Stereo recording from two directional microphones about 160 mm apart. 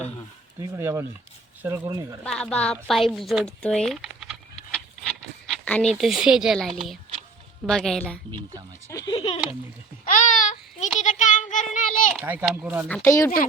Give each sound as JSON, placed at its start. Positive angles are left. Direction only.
{"t": 0.6, "sound": "a child's voice", "side_deg": -15}
{"t": 2.2, "sound": "speech", "side_deg": 5}
{"t": 7.7, "sound": "a woman's voice", "side_deg": 0}
{"t": 8.9, "sound": "speech", "side_deg": 25}
{"t": 10.1, "sound": "a sound", "side_deg": 55}
{"t": 11.0, "sound": "child singing", "side_deg": 50}
{"t": 12.2, "sound": "a child's voice", "side_deg": -10}
{"t": 13.1, "sound": "speech", "side_deg": 20}